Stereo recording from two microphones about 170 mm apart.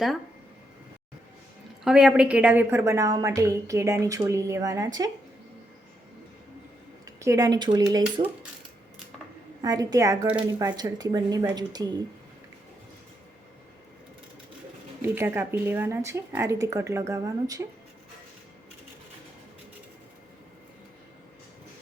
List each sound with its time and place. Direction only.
1.8 s a woman's voice: 5° right (ahead or behind); by 5.1 s 20° right (ahead or behind)
7.2 s a woman's voice: 20° right (ahead or behind)
9.6 s a woman's voice: 20° right (ahead or behind)
15.1 s a woman's voice: 15° right (ahead or behind)